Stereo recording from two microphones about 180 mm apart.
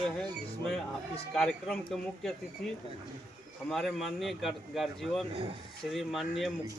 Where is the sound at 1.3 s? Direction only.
5° left (ahead or behind).